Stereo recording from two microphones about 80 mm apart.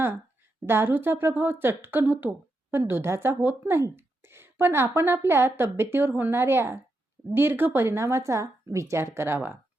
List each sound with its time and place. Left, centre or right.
0.6 s a woman's voice: right